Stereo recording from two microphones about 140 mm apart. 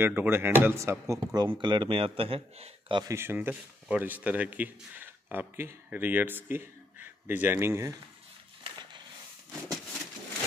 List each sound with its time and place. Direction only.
0.0 s speech: 15° right (ahead or behind); by 2.7 s 45° right (ahead or behind)
2.9 s speech: 30° right (ahead or behind)
3.2 s speech: 15° right (ahead or behind)